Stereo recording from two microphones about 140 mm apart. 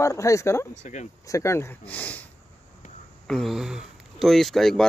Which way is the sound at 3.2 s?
Centre (ahead or behind).